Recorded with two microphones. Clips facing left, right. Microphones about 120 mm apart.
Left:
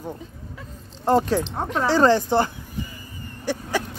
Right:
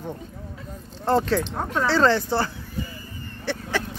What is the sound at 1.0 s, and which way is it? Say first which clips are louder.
Speech: left 2 dB; 15° left (ahead or behind).